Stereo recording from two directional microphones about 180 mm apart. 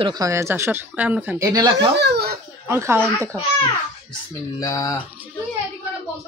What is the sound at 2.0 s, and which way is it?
Speech, 65° right (ahead or behind).